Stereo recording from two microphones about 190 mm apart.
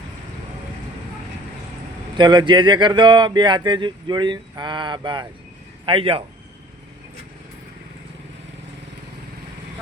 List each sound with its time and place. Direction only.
2.1 s speech: 25° right (ahead or behind)